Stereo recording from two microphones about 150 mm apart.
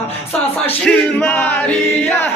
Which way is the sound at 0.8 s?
5° left (ahead or behind).